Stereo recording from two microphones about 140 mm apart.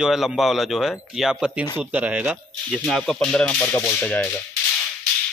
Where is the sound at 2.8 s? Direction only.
5° left (ahead or behind).